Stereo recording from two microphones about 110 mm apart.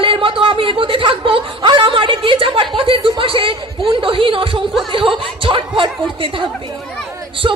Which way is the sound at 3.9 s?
50° right (ahead or behind).